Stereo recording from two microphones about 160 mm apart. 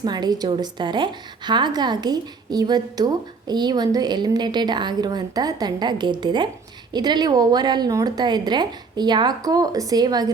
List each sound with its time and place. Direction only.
0.0 s a woman's voice: 25° right (ahead or behind)